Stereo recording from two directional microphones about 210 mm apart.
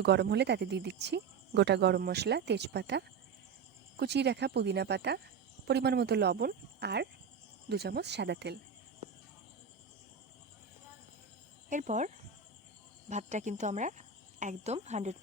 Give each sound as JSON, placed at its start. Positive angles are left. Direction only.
{"t": 0.0, "sound": "speech", "side_deg": -55}
{"t": 11.7, "sound": "speech", "side_deg": -35}